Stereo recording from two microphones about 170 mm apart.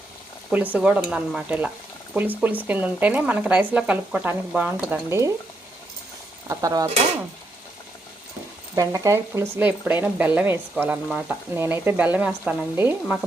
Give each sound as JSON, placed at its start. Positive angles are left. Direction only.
{"t": 0.5, "sound": "speech", "side_deg": -10}
{"t": 6.5, "sound": "stir", "side_deg": -20}
{"t": 8.7, "sound": "speech", "side_deg": -20}